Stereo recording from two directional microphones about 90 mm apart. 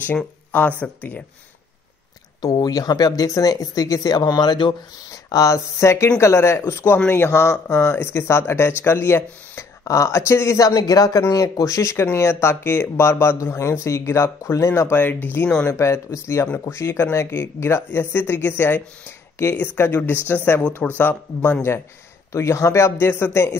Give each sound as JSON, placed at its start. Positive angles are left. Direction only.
{"t": 0.2, "sound": "speech", "side_deg": 15}
{"t": 2.4, "sound": "speech", "side_deg": 45}
{"t": 5.1, "sound": "speech", "side_deg": 40}
{"t": 15.7, "sound": "speech", "side_deg": 30}